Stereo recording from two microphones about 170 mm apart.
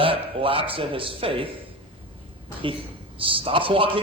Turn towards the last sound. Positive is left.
turn(degrees=-30)  # may be behind; listen again after turning